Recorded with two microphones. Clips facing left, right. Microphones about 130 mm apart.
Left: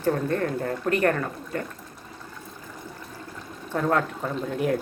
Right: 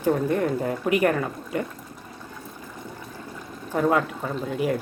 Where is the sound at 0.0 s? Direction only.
10° right (ahead or behind).